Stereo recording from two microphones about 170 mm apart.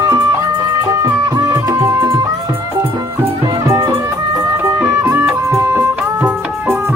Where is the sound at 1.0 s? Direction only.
20° right (ahead or behind).